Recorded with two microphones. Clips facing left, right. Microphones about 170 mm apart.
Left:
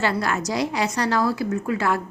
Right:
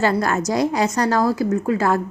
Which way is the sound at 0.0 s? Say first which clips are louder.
Right 4 dB; 45° right (ahead or behind).